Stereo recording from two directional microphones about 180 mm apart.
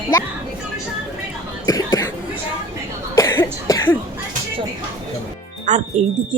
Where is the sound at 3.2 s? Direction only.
15° left (ahead or behind).